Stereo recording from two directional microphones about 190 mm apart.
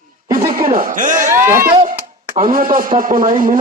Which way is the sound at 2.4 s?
45° right (ahead or behind).